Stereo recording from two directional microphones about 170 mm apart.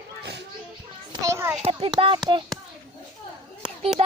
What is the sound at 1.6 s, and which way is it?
Speech, 35° right (ahead or behind).